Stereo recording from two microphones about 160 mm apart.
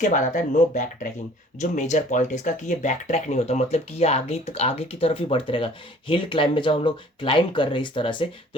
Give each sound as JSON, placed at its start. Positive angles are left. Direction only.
{"t": 0.0, "sound": "speech", "side_deg": 50}